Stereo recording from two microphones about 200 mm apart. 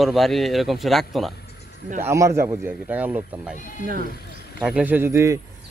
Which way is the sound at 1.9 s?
15° right (ahead or behind).